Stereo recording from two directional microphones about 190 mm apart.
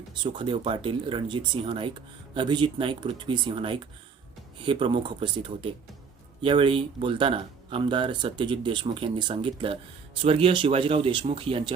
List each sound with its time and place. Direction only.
0.1 s speech: 25° right (ahead or behind)